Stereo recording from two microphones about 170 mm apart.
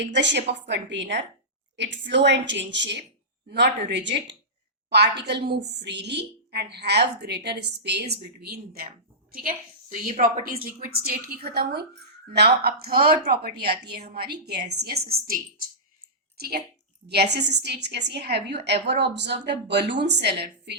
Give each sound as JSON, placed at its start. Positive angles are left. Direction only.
{"t": 0.0, "sound": "a woman's voice", "side_deg": -90}
{"t": 4.9, "sound": "a woman's voice", "side_deg": -75}
{"t": 9.3, "sound": "a woman's voice", "side_deg": -55}
{"t": 17.1, "sound": "a woman's voice", "side_deg": -75}